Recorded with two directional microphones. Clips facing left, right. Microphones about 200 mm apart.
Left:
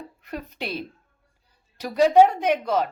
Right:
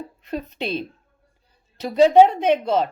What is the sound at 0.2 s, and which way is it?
A woman's voice, 25° right (ahead or behind).